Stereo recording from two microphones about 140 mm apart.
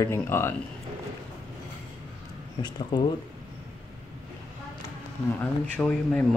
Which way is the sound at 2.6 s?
30° left (ahead or behind).